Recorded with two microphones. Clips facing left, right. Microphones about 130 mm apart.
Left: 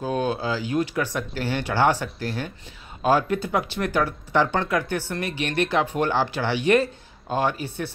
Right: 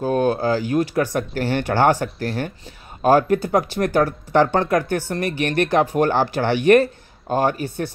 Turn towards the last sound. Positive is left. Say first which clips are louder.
# right 4 dB
turn(degrees=-45)  # may be behind; listen again after turning